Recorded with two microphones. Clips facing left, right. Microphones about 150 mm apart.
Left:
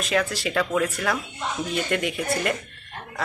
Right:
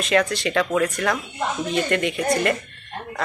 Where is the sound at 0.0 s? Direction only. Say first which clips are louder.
Right 4 dB; 5° left (ahead or behind).